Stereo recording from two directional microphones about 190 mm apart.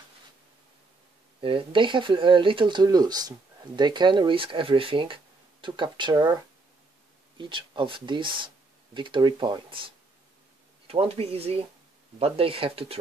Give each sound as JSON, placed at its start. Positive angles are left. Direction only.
{"t": 1.4, "sound": "speech", "side_deg": -30}
{"t": 7.3, "sound": "speech", "side_deg": -25}
{"t": 10.9, "sound": "speech", "side_deg": -30}